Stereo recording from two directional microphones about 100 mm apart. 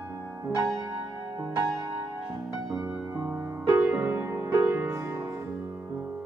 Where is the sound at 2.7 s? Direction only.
5° right (ahead or behind); by 5.3 s 25° right (ahead or behind).